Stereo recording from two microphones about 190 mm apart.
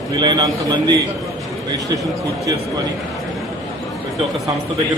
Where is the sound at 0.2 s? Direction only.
20° right (ahead or behind).